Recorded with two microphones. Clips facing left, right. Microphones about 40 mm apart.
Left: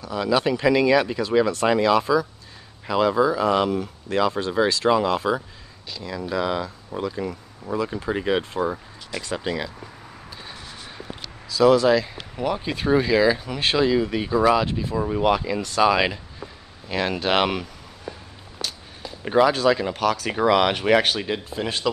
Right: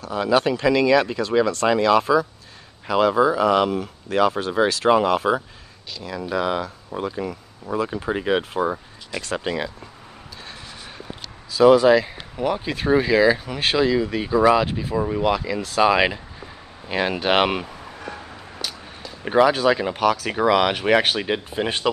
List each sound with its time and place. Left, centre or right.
0.1 s speech: centre
0.6 s speech: centre
2.0 s speech: centre
3.7 s speech: centre
6.1 s speech: right
7.1 s speech: centre
11.5 s speech: centre
18.6 s a sound: centre
19.2 s speech: centre
21.5 s speech: right